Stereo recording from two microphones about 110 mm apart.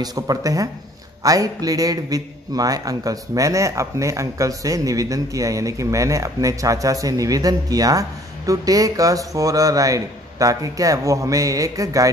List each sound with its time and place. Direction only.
0.0 s a man's voice: 35° right (ahead or behind)